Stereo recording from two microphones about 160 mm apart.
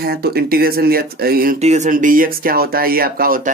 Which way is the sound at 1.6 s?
45° right (ahead or behind).